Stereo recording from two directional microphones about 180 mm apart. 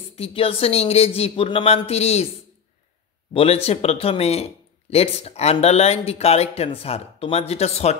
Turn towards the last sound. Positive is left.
turn(degrees=35)  # may be behind; listen again after turning